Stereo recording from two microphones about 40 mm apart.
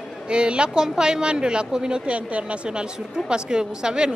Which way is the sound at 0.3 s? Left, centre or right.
Right.